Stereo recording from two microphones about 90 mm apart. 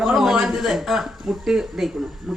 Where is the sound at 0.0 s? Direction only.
5° right (ahead or behind).